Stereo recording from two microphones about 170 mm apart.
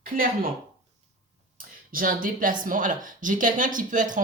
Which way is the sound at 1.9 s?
55° right (ahead or behind).